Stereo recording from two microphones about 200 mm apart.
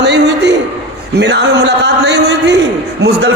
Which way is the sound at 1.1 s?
60° right (ahead or behind).